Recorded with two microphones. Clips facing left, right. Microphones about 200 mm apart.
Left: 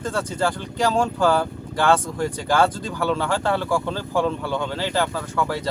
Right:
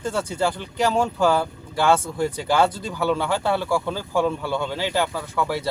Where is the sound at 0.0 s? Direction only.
10° right (ahead or behind).